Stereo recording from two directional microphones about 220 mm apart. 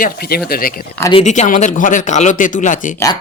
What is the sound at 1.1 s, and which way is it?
Speech, 30° left (ahead or behind).